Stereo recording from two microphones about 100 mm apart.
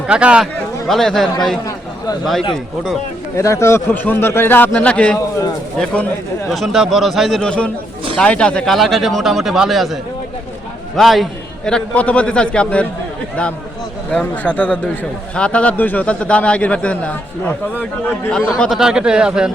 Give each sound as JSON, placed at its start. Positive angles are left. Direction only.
{"t": 0.1, "sound": "speech", "side_deg": -10}
{"t": 0.9, "sound": "speech", "side_deg": 0}
{"t": 3.3, "sound": "a man's voice", "side_deg": 30}
{"t": 6.5, "sound": "a man's voice", "side_deg": 0}
{"t": 14.1, "sound": "a man's voice", "side_deg": 15}
{"t": 18.3, "sound": "a man's voice", "side_deg": 10}
{"t": 18.8, "sound": "speech", "side_deg": -5}